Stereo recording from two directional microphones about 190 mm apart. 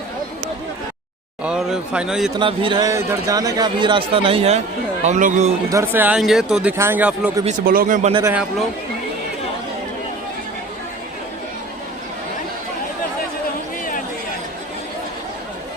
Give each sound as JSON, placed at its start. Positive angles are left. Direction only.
{"t": 1.5, "sound": "speech", "side_deg": -5}
{"t": 2.3, "sound": "speech", "side_deg": -25}
{"t": 5.6, "sound": "speech", "side_deg": -15}
{"t": 7.6, "sound": "speech", "side_deg": -50}
{"t": 8.3, "sound": "speech", "side_deg": -5}